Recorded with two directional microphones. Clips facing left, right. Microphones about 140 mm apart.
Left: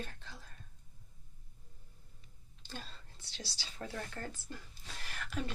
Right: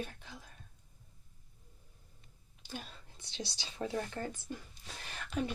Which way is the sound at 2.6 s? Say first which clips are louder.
Right 3 dB; 15° right (ahead or behind).